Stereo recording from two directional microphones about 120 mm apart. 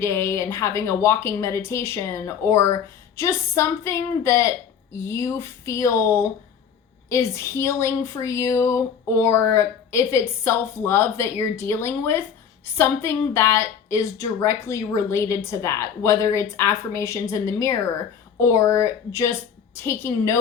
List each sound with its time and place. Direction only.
0.0 s speech: 20° left (ahead or behind)